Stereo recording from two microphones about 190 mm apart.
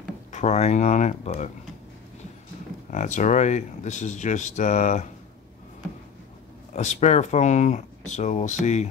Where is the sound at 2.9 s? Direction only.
40° left (ahead or behind).